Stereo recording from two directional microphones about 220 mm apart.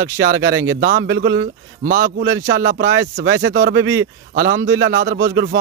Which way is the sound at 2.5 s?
50° right (ahead or behind).